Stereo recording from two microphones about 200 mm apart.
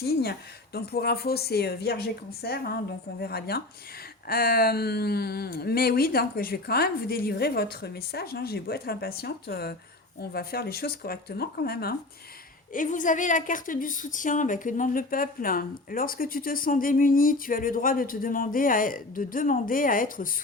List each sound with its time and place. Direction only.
0.0 s a woman's voice: 50° left (ahead or behind)
12.7 s a woman's voice: 40° left (ahead or behind)